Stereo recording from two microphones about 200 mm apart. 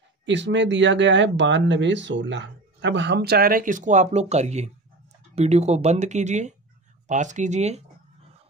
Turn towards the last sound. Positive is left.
turn(degrees=-35)  # may be behind; listen again after turning